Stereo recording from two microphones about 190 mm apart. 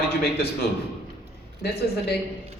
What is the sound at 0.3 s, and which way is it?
Speech, 55° left (ahead or behind).